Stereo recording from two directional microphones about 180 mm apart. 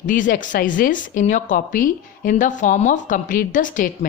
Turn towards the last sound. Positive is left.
turn(degrees=50)  # may be behind; listen again after turning